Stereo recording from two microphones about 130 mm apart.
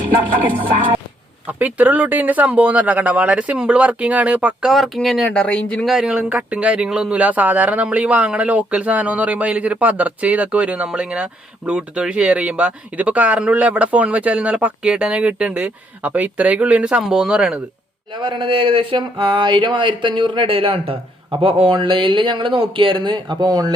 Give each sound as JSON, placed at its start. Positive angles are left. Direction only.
{"t": 1.5, "sound": "speech", "side_deg": -10}
{"t": 18.1, "sound": "speech", "side_deg": -40}